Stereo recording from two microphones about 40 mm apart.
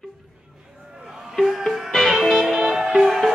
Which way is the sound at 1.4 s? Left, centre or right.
Centre.